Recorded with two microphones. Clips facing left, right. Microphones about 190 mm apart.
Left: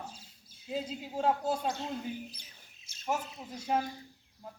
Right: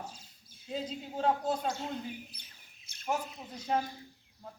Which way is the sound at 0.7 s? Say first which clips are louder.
Left 1 dB; 5° left (ahead or behind).